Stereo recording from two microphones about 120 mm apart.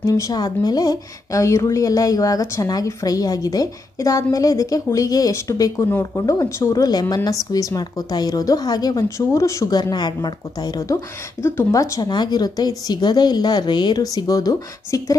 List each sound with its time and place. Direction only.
0.0 s a woman's voice: 30° left (ahead or behind)